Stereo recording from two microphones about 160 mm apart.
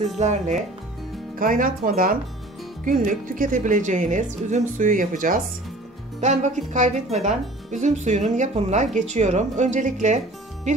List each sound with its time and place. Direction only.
0.2 s speech: 45° right (ahead or behind)
1.4 s speech: 60° right (ahead or behind)